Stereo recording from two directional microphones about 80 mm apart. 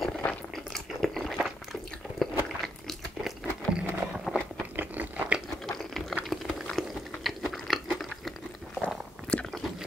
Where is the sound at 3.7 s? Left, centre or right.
Centre.